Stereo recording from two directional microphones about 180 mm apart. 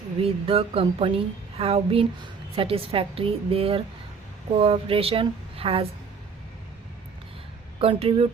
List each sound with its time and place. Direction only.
0.2 s speech: 30° right (ahead or behind)
7.8 s speech: 30° right (ahead or behind)